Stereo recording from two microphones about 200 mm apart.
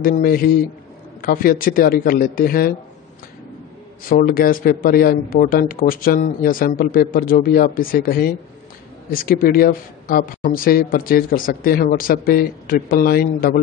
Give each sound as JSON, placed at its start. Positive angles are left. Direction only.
{"t": 0.0, "sound": "speech", "side_deg": 45}
{"t": 4.0, "sound": "speech", "side_deg": 45}